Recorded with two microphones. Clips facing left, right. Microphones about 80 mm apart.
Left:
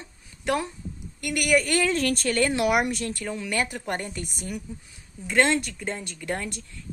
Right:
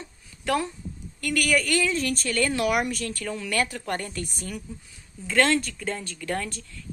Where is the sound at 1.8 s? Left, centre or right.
Left.